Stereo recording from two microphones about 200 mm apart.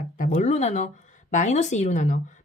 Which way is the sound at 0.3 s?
35° left (ahead or behind).